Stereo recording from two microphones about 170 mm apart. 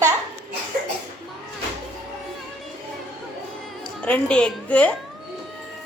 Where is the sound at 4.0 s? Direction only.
5° left (ahead or behind).